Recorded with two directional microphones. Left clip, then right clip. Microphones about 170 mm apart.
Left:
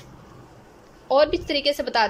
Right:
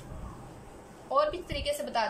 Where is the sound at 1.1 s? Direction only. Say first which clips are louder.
Left 9 dB; 55° left (ahead or behind).